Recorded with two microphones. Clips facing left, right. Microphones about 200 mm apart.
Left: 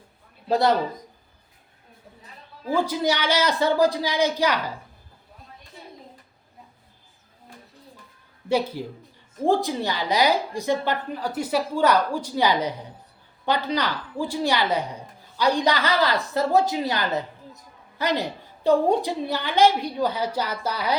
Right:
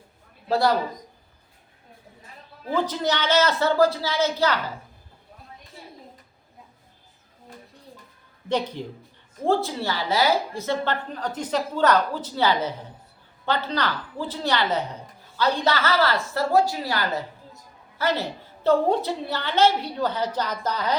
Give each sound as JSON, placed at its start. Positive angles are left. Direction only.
{"t": 0.4, "sound": "a man's voice", "side_deg": 20}
{"t": 2.6, "sound": "a woman's voice", "side_deg": 10}
{"t": 8.4, "sound": "a woman's voice", "side_deg": 10}